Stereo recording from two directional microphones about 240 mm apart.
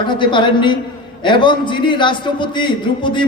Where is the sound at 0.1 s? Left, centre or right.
Centre.